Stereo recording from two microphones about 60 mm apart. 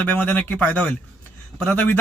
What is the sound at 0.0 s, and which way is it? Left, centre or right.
A man's voice, left.